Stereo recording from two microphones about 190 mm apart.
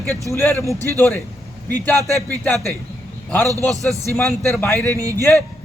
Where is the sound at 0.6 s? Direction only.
15° right (ahead or behind).